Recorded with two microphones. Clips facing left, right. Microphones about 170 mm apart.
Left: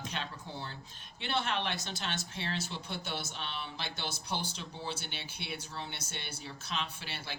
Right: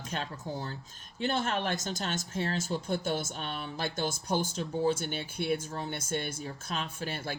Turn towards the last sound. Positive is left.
turn(degrees=-50)  # may be behind; listen again after turning